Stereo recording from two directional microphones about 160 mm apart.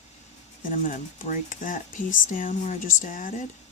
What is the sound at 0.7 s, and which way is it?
Speech, 55° left (ahead or behind).